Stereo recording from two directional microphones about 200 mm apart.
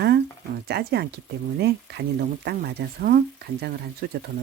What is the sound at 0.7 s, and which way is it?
Speech, 55° right (ahead or behind).